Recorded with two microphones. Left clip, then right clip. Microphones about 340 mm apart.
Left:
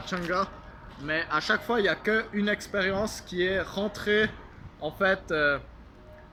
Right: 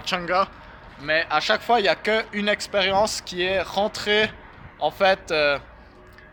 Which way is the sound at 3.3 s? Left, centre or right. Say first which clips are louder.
Right 2 dB; right.